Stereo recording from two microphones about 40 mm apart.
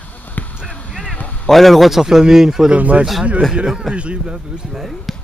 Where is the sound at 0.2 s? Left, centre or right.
Left.